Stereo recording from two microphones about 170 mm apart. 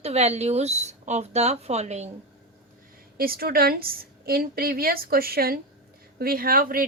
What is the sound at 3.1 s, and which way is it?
A woman's voice, 60° right (ahead or behind).